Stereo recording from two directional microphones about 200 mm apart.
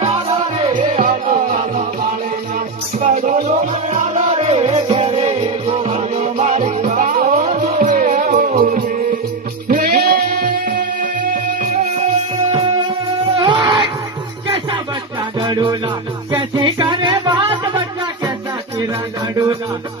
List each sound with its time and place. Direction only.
0.6 s music: 35° right (ahead or behind)
3.2 s music: 40° right (ahead or behind)
13.3 s a sound: 25° right (ahead or behind)
14.4 s music: 25° right (ahead or behind)